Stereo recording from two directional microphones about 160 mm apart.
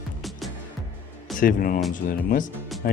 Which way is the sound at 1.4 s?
60° left (ahead or behind).